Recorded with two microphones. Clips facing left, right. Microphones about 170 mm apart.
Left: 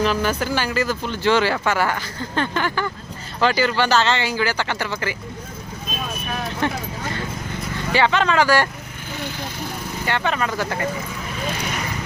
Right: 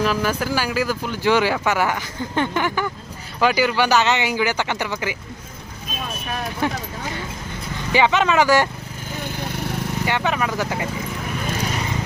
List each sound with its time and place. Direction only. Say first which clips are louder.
0.0 s speech: even; 5° right (ahead or behind)
6.6 s speech: even; 10° right (ahead or behind)
7.9 s speech: right 1 dB; 15° right (ahead or behind)
10.1 s speech: left 1 dB; 15° right (ahead or behind)